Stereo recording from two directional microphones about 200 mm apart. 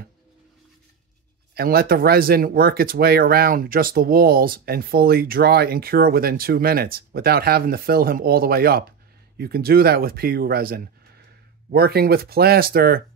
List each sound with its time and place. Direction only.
1.5 s speech: 50° right (ahead or behind)